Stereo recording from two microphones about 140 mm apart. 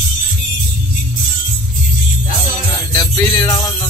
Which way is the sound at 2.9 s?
30° left (ahead or behind).